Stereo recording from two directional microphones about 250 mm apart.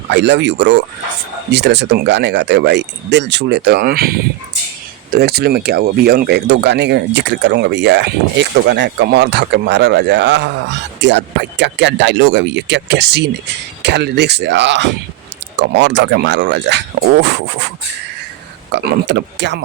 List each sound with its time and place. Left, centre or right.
0.1 s speech: right
18.7 s speech: right